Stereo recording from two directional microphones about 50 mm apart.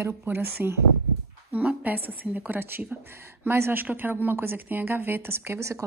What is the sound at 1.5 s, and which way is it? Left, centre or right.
A woman's voice, right.